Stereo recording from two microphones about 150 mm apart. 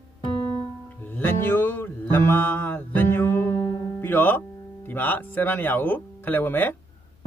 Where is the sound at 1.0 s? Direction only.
15° left (ahead or behind).